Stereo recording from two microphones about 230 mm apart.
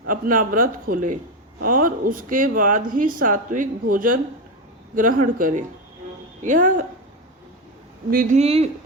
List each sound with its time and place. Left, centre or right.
0.1 s speech: right
8.1 s speech: right